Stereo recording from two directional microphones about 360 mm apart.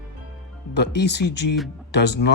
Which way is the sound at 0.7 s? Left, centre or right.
Left.